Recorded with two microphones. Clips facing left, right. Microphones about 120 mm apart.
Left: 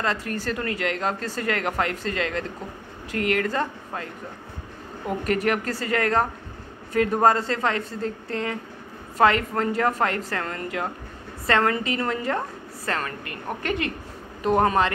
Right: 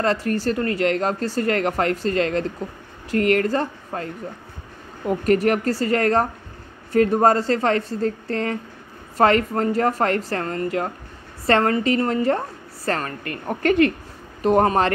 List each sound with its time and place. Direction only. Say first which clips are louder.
0.0 s a woman's voice: right 6 dB; 35° right (ahead or behind)
5.2 s a woman's voice: right 6 dB; 40° right (ahead or behind)
14.6 s a woman's voice: right 2 dB; 40° right (ahead or behind)